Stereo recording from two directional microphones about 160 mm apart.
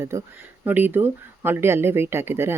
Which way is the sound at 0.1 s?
15° right (ahead or behind).